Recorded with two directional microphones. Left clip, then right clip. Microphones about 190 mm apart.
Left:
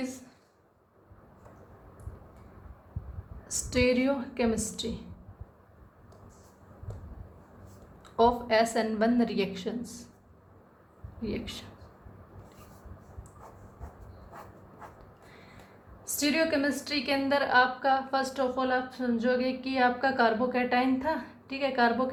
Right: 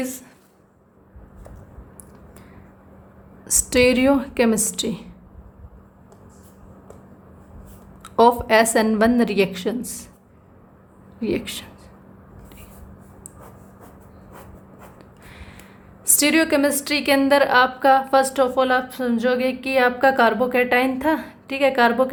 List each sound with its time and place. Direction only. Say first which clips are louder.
0.0 s a woman's voice: right 9 dB; 40° right (ahead or behind)
3.4 s a woman's voice: right 10 dB; 45° right (ahead or behind)
8.0 s a woman's voice: right 9 dB; 45° right (ahead or behind)
11.2 s a woman's voice: right 11 dB; 40° right (ahead or behind)
16.0 s a woman's voice: right 9 dB; 50° right (ahead or behind)